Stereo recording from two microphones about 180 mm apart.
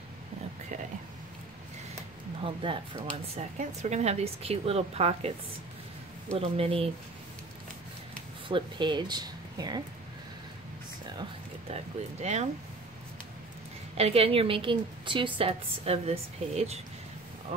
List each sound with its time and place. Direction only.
2.4 s speech: 30° right (ahead or behind)
3.1 s a woman's voice: 40° right (ahead or behind)
6.3 s a woman's voice: 30° right (ahead or behind)
8.5 s speech: 25° right (ahead or behind)
11.7 s a woman's voice: 40° right (ahead or behind)
13.9 s a woman's voice: 35° right (ahead or behind)